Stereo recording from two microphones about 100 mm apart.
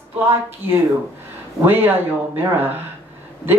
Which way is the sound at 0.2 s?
25° right (ahead or behind).